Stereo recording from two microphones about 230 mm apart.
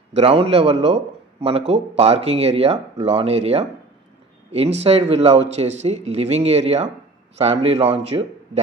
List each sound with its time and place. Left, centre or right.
0.1 s a man's voice: right
4.8 s a man's voice: right